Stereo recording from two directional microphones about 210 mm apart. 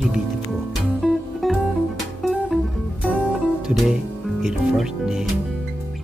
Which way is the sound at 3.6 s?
Centre (ahead or behind).